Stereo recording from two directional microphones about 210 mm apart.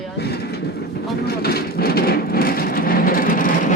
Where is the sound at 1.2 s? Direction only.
45° left (ahead or behind).